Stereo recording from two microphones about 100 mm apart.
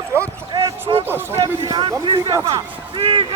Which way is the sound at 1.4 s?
30° right (ahead or behind).